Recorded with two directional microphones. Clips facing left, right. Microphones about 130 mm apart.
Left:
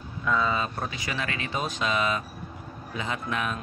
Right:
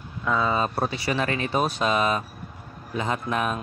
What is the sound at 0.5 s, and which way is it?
Speech, 35° right (ahead or behind).